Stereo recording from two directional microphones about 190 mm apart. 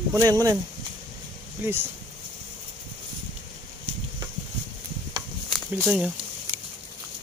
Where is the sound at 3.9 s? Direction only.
35° right (ahead or behind).